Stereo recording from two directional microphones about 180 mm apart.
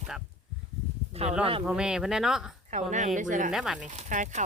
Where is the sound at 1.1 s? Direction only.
35° right (ahead or behind).